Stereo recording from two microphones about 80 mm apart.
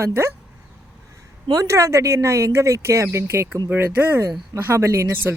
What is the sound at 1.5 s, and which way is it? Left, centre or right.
A woman's voice, right.